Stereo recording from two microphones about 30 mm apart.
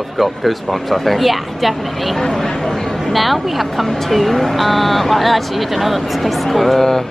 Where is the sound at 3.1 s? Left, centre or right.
Centre.